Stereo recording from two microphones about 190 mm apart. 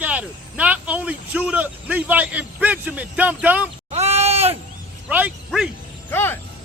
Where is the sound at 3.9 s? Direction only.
35° right (ahead or behind).